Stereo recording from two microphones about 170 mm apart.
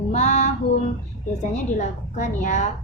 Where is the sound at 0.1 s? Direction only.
40° left (ahead or behind).